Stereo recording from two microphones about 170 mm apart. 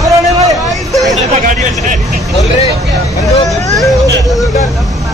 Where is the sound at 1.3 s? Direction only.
45° right (ahead or behind).